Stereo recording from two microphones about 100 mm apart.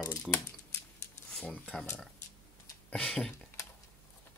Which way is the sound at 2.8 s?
5° left (ahead or behind).